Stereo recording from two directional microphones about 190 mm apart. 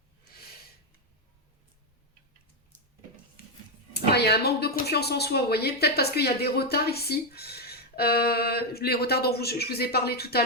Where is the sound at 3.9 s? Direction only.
60° left (ahead or behind).